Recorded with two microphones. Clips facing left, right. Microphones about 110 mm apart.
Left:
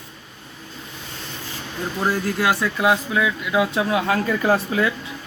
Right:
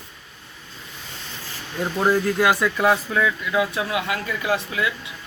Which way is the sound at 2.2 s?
Centre (ahead or behind).